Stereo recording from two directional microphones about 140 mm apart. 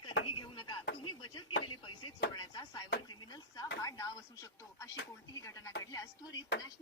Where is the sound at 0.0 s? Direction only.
35° left (ahead or behind).